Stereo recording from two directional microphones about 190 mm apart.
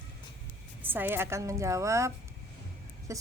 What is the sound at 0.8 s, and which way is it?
A woman's voice, 10° right (ahead or behind).